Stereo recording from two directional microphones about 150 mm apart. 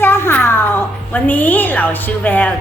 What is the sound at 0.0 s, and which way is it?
A woman's voice, 15° left (ahead or behind).